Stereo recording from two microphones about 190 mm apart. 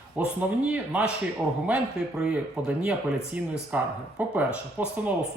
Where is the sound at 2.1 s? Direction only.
5° right (ahead or behind).